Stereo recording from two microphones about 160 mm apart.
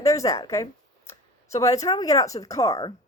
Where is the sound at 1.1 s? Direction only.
20° left (ahead or behind).